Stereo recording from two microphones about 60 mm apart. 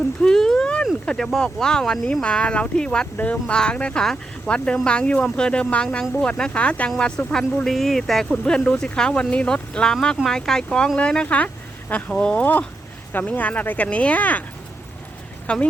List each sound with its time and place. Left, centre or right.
0.2 s a sound: centre
1.0 s speech: centre
12.4 s speech: left
15.5 s speech: centre